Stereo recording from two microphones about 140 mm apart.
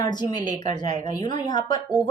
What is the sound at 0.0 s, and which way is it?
Speech, 30° left (ahead or behind).